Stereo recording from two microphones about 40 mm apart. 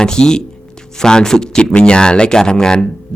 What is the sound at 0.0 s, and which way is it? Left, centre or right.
Speech, centre.